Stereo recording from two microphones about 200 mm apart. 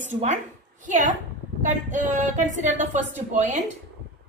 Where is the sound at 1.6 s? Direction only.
40° right (ahead or behind).